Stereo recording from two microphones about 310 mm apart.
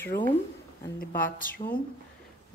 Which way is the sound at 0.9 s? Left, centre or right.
Left.